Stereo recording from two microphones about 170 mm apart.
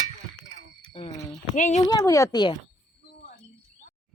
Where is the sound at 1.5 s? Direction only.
45° left (ahead or behind).